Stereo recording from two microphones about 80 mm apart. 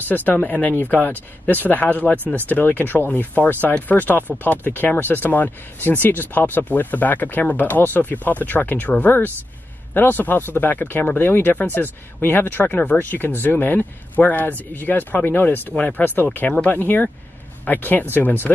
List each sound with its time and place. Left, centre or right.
0.1 s speech: left